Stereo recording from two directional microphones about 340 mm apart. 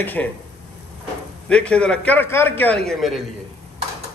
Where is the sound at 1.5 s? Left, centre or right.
Centre.